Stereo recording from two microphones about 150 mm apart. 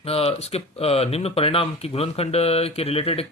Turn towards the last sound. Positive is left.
turn(degrees=40)  # may be behind; listen again after turning